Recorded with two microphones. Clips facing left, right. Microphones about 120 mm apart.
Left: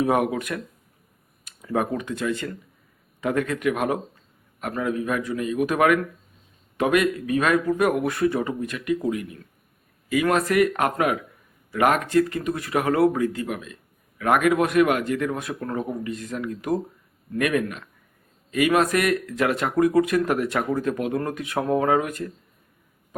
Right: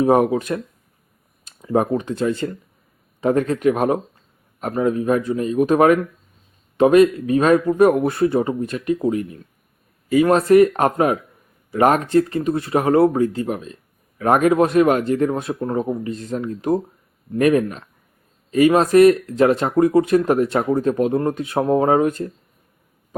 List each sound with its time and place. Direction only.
0.0 s a man's voice: 30° right (ahead or behind)